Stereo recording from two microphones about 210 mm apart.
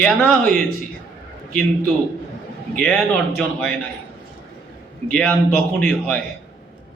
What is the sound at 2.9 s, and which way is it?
Speech, centre (ahead or behind).